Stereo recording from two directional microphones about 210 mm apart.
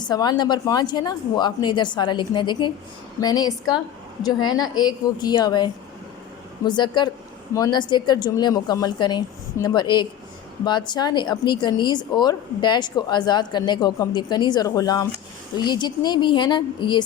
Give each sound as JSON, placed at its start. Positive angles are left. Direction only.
{"t": 0.0, "sound": "a woman's voice", "side_deg": 20}